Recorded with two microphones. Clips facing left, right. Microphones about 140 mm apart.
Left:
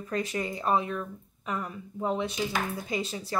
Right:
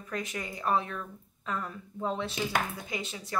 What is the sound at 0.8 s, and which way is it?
Speech, 15° left (ahead or behind).